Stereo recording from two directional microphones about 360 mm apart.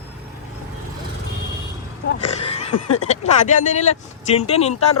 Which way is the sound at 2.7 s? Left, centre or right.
Left.